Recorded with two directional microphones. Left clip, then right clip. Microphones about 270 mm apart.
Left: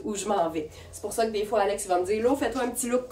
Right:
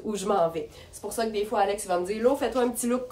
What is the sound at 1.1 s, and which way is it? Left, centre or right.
A woman's voice, centre.